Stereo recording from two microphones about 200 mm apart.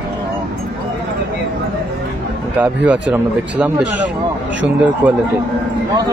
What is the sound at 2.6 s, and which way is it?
Speech, 5° right (ahead or behind).